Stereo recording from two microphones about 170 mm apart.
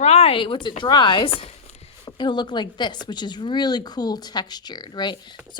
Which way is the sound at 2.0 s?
25° left (ahead or behind).